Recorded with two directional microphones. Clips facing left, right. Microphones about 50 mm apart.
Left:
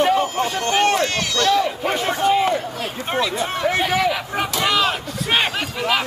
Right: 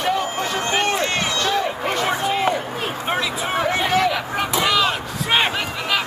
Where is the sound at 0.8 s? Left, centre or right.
Centre.